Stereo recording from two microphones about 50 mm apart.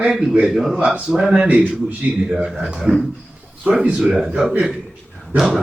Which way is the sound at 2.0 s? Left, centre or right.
Right.